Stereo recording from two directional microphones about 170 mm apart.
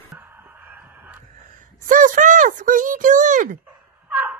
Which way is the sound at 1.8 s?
50° right (ahead or behind).